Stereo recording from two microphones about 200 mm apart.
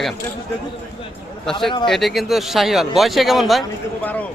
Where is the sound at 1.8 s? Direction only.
Centre (ahead or behind).